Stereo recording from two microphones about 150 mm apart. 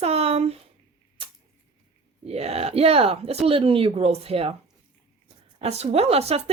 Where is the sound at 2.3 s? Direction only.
45° right (ahead or behind).